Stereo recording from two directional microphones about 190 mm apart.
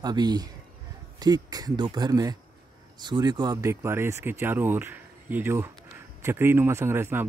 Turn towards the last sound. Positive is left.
turn(degrees=-10)  # may be behind; listen again after turning